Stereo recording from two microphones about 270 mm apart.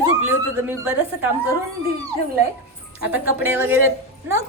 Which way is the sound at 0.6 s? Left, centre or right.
Centre.